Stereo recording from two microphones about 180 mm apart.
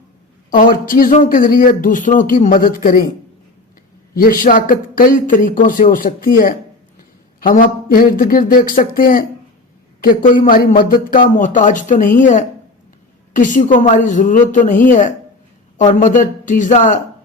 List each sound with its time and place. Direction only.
0.5 s speech: 50° left (ahead or behind)
4.1 s speech: 50° left (ahead or behind)